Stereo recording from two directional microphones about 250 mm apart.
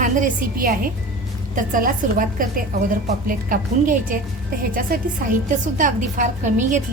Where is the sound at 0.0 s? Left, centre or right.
Right.